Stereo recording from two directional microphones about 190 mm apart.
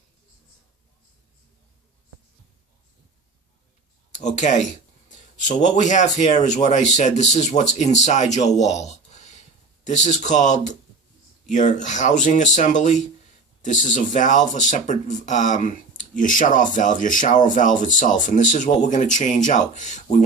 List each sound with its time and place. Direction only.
4.4 s speech: 40° left (ahead or behind)
5.7 s speech: 40° left (ahead or behind)